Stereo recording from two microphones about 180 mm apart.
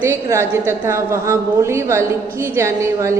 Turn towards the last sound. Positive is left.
turn(degrees=-15)  # may be behind; listen again after turning